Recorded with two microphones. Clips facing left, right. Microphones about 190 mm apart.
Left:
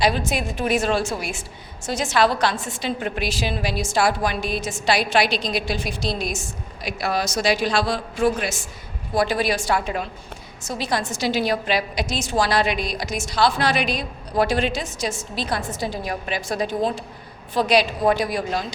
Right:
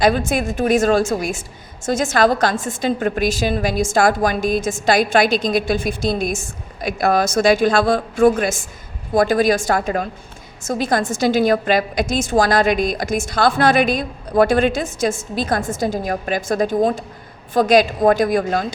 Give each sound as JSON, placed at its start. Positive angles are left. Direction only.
{"t": 0.0, "sound": "a woman's voice", "side_deg": -50}